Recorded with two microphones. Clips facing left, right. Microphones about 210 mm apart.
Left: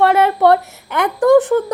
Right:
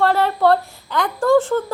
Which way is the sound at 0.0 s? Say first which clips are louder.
Left 4 dB; 20° left (ahead or behind).